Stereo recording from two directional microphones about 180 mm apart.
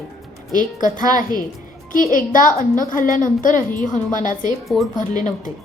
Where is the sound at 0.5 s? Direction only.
45° left (ahead or behind).